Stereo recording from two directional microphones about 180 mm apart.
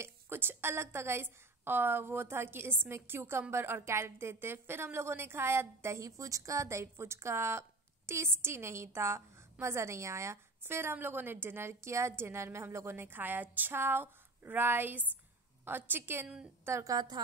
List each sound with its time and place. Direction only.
0.0 s a woman's voice: 10° right (ahead or behind)